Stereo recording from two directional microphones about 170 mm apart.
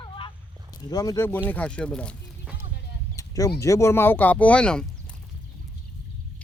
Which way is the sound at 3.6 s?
15° left (ahead or behind).